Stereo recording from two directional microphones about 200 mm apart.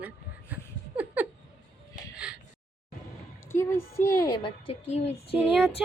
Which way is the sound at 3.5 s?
10° left (ahead or behind).